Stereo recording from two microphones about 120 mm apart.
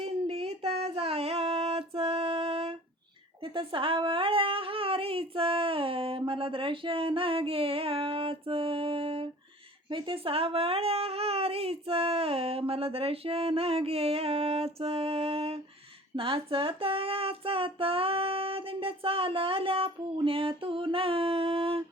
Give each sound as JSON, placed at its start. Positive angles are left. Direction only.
{"t": 0.0, "sound": "music", "side_deg": -55}
{"t": 3.4, "sound": "a woman's voice", "side_deg": -45}
{"t": 16.1, "sound": "child singing", "side_deg": -50}